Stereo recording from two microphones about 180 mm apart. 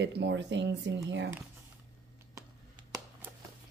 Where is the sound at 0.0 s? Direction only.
75° right (ahead or behind).